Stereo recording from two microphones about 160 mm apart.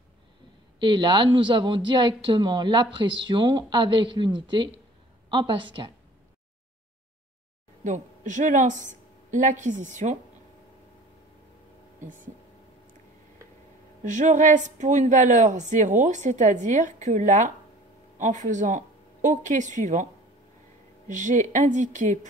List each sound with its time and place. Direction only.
0.7 s a woman's voice: 30° right (ahead or behind)
7.8 s speech: 50° right (ahead or behind)
14.0 s speech: 50° right (ahead or behind)
21.1 s speech: 50° right (ahead or behind)